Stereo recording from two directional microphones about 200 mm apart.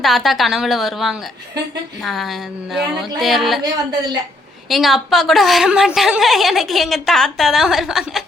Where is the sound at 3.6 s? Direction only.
20° right (ahead or behind).